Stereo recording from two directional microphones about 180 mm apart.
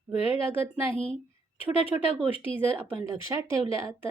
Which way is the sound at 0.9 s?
30° left (ahead or behind).